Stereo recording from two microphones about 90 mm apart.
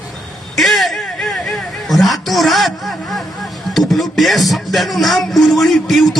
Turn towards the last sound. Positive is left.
turn(degrees=0)  # may be behind; listen again after turning